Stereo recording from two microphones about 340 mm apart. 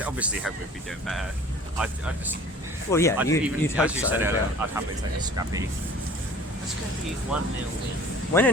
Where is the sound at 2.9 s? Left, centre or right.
Centre.